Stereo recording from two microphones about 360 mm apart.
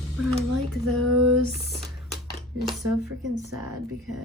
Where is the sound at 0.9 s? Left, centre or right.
Right.